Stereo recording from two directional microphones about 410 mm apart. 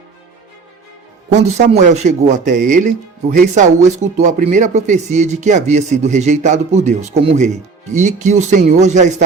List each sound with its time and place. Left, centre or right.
1.3 s speech: centre